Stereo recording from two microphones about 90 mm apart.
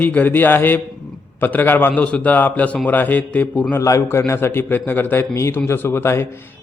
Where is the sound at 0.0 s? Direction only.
20° left (ahead or behind).